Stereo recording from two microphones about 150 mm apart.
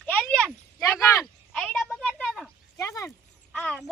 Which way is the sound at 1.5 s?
5° left (ahead or behind).